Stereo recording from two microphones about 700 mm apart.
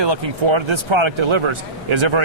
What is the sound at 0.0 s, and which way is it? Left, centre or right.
Speech, right.